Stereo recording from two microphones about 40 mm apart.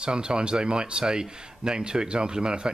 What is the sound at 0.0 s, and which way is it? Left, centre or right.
A man's voice, right.